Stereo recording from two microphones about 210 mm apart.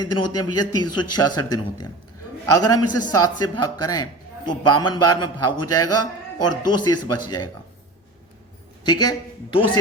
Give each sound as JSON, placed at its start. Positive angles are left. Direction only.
{"t": 0.0, "sound": "a man's voice", "side_deg": 20}
{"t": 8.8, "sound": "speech", "side_deg": 20}